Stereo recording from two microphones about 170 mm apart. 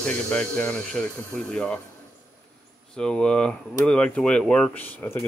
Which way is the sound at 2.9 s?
5° left (ahead or behind).